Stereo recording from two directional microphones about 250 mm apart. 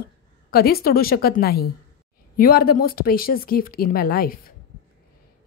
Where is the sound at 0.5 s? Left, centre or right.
Left.